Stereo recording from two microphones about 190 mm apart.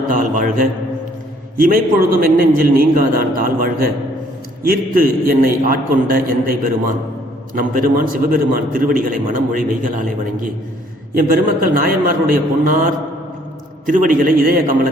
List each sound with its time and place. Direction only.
0.1 s a man's voice: 45° right (ahead or behind)
11.1 s a man's voice: 50° right (ahead or behind)